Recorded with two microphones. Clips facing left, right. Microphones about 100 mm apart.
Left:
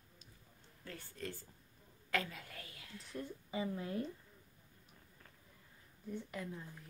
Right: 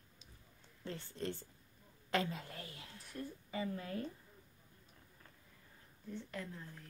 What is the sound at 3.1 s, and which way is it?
Speech, 20° left (ahead or behind).